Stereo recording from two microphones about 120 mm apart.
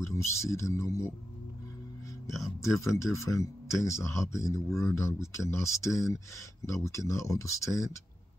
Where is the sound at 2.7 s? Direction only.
25° left (ahead or behind).